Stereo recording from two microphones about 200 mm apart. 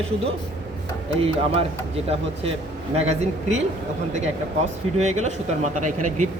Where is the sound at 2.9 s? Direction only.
35° right (ahead or behind).